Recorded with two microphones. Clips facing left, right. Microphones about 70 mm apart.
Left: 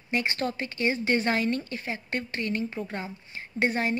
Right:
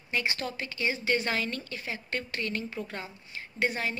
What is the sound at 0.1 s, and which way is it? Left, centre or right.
A woman's voice, left.